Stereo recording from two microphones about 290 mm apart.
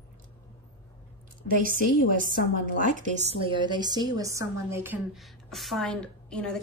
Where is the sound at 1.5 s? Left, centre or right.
Right.